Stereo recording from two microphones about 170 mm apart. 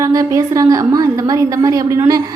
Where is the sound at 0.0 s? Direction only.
20° right (ahead or behind).